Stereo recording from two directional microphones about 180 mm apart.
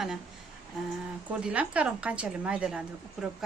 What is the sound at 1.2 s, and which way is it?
A woman's voice, 5° right (ahead or behind).